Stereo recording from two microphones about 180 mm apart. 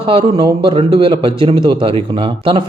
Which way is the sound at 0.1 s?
25° right (ahead or behind).